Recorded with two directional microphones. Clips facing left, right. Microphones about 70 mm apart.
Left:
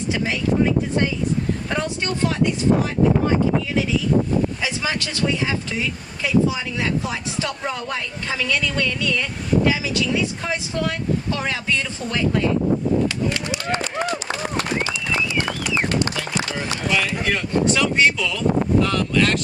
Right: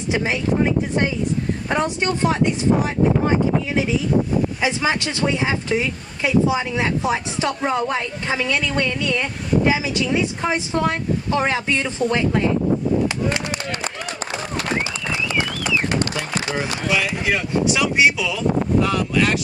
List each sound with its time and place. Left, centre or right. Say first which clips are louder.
0.1 s speech: right 2 dB; right
4.6 s speech: right 4 dB; right
16.9 s speech: right 1 dB; centre